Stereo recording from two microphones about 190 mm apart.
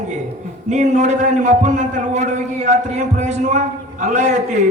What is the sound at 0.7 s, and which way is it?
A man's voice, 40° right (ahead or behind).